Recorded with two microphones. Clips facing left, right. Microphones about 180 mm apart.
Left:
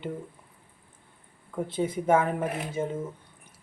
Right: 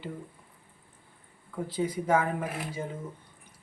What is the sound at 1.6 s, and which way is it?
Speech, 25° left (ahead or behind).